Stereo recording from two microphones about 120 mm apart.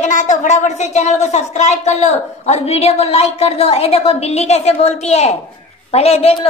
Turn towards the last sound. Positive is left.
turn(degrees=60)  # may be behind; listen again after turning